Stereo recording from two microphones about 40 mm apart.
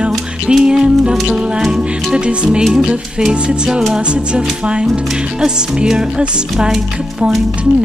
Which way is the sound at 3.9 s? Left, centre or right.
Right.